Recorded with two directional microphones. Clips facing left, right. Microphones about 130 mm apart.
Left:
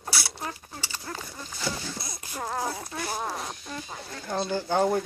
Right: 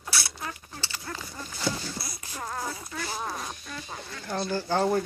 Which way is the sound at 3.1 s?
20° left (ahead or behind).